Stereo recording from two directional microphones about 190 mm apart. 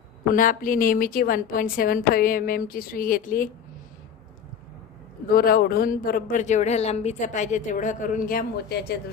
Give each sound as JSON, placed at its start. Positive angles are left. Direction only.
{"t": 0.3, "sound": "speech", "side_deg": 45}
{"t": 5.3, "sound": "speech", "side_deg": 55}